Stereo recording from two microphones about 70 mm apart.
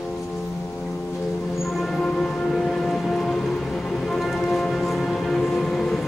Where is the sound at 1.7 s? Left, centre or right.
Centre.